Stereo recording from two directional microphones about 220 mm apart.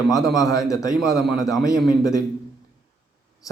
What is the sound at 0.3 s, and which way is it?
A man's voice, 15° left (ahead or behind).